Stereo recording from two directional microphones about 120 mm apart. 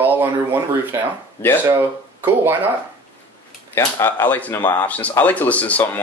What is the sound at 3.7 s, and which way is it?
Speech, 20° left (ahead or behind).